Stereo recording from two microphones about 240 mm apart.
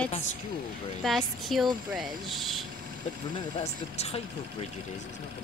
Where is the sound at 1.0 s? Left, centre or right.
Centre.